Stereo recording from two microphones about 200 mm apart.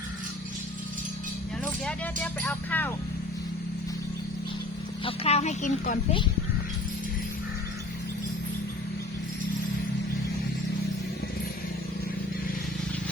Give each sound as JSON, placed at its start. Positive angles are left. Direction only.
{"t": 1.6, "sound": "speech", "side_deg": 5}
{"t": 5.0, "sound": "speech", "side_deg": 30}